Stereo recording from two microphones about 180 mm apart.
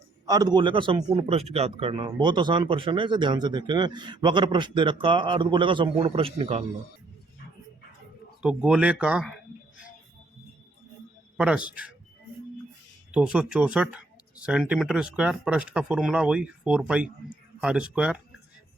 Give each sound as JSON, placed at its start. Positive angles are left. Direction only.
{"t": 0.3, "sound": "a man's voice", "side_deg": -20}
{"t": 8.4, "sound": "speech", "side_deg": -5}
{"t": 11.3, "sound": "speech", "side_deg": -5}
{"t": 13.1, "sound": "speech", "side_deg": -5}